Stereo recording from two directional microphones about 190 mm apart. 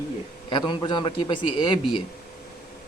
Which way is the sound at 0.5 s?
25° left (ahead or behind).